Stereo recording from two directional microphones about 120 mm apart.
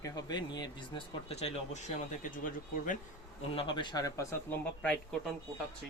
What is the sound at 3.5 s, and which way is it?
Speech, 40° left (ahead or behind).